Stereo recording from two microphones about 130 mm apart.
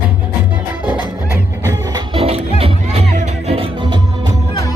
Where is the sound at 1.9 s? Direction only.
45° right (ahead or behind).